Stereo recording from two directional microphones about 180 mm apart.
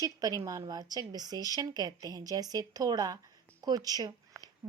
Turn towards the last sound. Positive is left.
turn(degrees=-20)  # may be behind; listen again after turning